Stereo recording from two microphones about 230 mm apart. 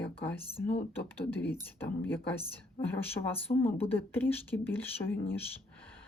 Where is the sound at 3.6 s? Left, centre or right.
Centre.